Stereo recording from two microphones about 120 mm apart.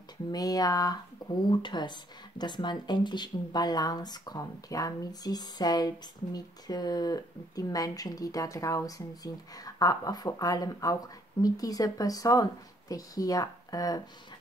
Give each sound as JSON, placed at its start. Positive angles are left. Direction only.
{"t": 0.3, "sound": "speech", "side_deg": 30}